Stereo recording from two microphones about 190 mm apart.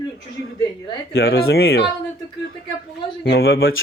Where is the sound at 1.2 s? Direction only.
55° left (ahead or behind).